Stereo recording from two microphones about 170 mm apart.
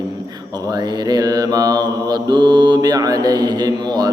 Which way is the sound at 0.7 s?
25° right (ahead or behind).